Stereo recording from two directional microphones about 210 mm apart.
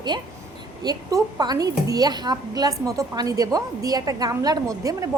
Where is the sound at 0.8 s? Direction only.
20° right (ahead or behind).